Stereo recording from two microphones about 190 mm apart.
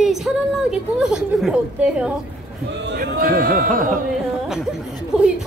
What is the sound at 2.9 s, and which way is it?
Speech, 50° right (ahead or behind).